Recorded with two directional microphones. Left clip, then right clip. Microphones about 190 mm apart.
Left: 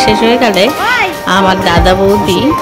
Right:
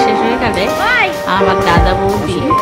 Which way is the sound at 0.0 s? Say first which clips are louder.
Left 4 dB; 25° left (ahead or behind).